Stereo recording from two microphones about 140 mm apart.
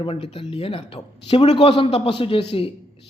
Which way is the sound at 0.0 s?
40° left (ahead or behind).